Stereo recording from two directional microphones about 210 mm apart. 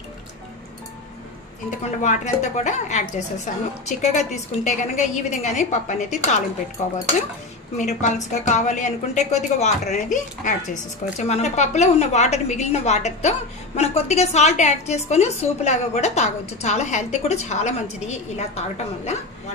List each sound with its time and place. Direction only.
1.8 s a woman's voice: 35° left (ahead or behind)